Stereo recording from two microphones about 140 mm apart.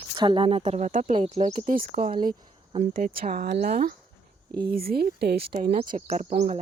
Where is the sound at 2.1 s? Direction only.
90° right.